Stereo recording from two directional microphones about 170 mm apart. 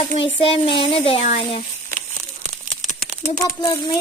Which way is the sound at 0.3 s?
35° left (ahead or behind).